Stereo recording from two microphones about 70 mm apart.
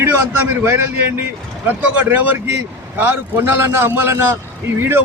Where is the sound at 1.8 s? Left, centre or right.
Right.